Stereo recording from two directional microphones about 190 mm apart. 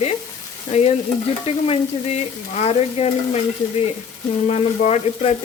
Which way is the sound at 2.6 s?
35° left (ahead or behind).